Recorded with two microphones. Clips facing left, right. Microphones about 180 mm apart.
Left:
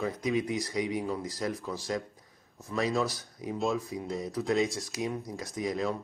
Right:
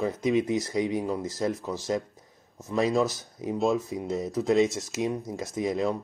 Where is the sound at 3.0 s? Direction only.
25° right (ahead or behind).